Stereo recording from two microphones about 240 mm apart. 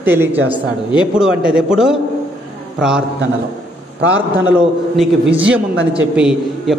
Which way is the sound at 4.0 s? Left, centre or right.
Right.